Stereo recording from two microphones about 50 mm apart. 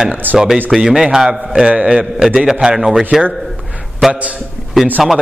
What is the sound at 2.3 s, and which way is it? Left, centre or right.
Speech, centre.